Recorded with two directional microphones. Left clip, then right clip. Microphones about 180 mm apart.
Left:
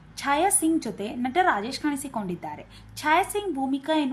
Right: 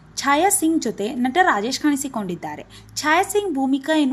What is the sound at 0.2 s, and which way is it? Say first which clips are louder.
A woman's voice: right 5 dB; 20° right (ahead or behind).